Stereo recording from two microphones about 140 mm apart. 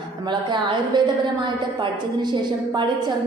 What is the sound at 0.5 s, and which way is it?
Speech, 30° right (ahead or behind).